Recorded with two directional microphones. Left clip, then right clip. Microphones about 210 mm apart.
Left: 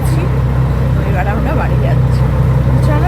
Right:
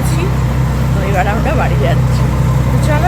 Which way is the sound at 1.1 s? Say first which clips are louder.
Right 4 dB; 20° right (ahead or behind).